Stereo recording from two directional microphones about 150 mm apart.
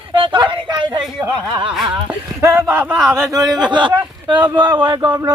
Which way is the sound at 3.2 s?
25° right (ahead or behind).